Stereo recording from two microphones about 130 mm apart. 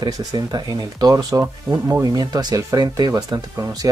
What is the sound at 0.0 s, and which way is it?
Speech, 30° right (ahead or behind).